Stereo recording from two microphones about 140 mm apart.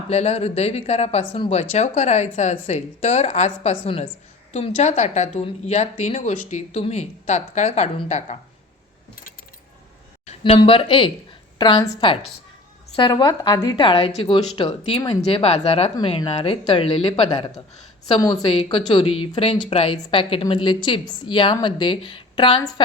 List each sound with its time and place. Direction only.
0.1 s speech: 50° left (ahead or behind)
10.2 s a sound: 45° left (ahead or behind)
10.6 s a woman's voice: 40° left (ahead or behind)
18.1 s a woman's voice: 25° left (ahead or behind)
18.4 s a woman's voice: 40° left (ahead or behind)